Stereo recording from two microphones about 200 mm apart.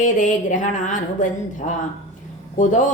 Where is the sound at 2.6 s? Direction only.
40° left (ahead or behind).